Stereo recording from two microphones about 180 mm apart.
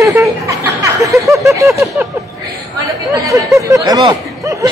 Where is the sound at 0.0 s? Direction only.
15° right (ahead or behind).